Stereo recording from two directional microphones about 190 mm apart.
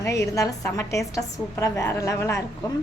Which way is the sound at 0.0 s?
15° left (ahead or behind).